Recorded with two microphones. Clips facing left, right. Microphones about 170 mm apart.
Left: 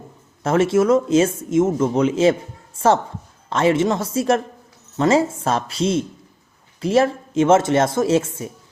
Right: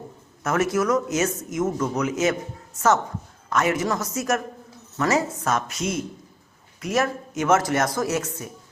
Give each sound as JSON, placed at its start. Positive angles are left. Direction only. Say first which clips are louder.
{"t": 0.4, "sound": "a woman's voice", "louder": "left 6 dB", "side_deg": 30}